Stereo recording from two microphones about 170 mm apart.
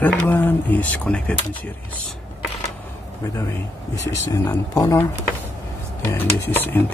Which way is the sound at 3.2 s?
20° left (ahead or behind).